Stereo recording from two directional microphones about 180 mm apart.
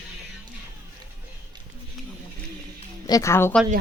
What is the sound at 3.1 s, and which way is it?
Speech, 20° left (ahead or behind).